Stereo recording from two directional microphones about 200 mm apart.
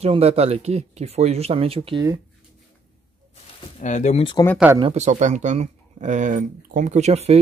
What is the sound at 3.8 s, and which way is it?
Speech, 35° left (ahead or behind).